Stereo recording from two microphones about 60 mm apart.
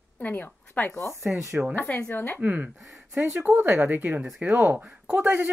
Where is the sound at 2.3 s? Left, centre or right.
Right.